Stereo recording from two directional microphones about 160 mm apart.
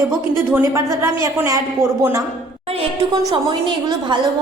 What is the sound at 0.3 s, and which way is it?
A woman's voice, 15° right (ahead or behind).